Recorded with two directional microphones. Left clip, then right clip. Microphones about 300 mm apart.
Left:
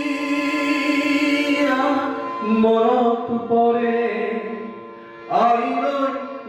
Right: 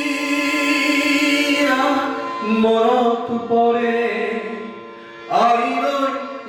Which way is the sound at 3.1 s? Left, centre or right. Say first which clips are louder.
Right 1 dB; left.